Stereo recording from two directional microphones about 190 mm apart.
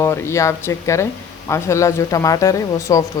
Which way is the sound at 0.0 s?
15° left (ahead or behind).